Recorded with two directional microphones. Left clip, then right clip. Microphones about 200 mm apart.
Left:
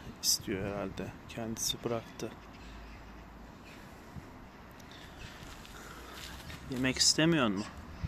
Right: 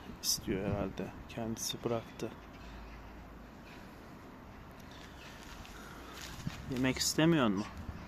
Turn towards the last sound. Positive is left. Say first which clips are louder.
# left 2 dB
turn(degrees=0)  # may be behind; listen again after turning